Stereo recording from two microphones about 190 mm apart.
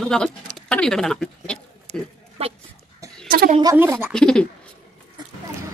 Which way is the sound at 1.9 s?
35° right (ahead or behind).